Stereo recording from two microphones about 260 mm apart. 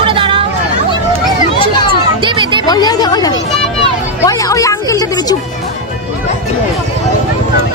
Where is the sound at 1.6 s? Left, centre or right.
Centre.